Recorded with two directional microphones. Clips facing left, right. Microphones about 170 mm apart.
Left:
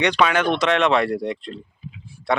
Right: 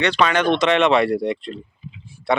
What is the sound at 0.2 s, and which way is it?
Speech, 5° left (ahead or behind).